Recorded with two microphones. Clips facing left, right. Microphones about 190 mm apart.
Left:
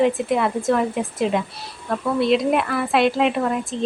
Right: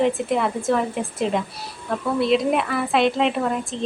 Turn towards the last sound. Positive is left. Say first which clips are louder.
# left 1 dB
turn(degrees=0)  # may be behind; listen again after turning